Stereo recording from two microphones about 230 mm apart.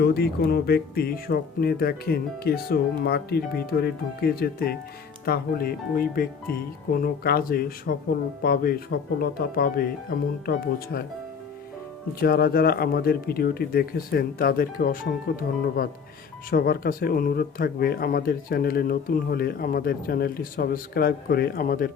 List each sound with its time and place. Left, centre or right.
0.0 s speech: left
12.2 s speech: left